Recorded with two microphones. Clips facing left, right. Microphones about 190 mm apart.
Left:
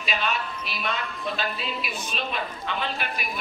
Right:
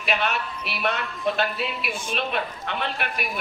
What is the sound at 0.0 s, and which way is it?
A man's voice, 65° right (ahead or behind).